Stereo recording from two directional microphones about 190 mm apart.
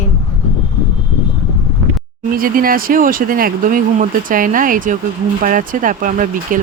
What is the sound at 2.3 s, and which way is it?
Speech, 50° right (ahead or behind).